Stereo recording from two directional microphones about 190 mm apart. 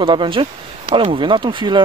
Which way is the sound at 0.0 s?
25° right (ahead or behind).